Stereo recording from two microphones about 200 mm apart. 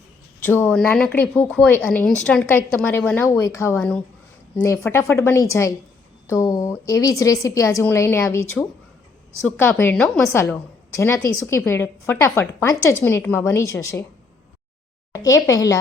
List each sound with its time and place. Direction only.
0.3 s a woman's voice: 10° left (ahead or behind)
10.2 s a woman's voice: 15° left (ahead or behind)
15.1 s speech: 15° left (ahead or behind)